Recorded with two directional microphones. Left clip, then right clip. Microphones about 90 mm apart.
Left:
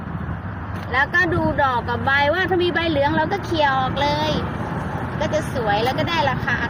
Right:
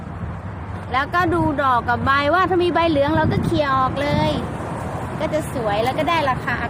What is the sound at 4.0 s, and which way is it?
Speech, 90° right.